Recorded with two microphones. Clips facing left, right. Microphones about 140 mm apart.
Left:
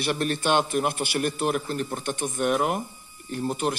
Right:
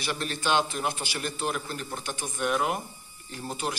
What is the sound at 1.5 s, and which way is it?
Speech, 45° left (ahead or behind).